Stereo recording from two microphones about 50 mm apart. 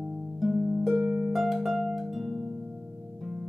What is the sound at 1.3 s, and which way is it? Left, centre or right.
Harp, centre.